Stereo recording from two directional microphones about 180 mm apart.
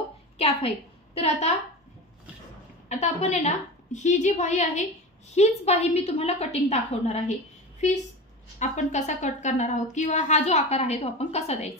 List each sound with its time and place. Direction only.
0.4 s a woman's voice: 35° left (ahead or behind)
2.9 s a woman's voice: 40° left (ahead or behind)